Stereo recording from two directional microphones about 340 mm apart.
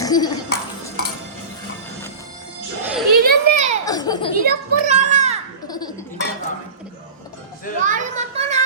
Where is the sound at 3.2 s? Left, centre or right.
Right.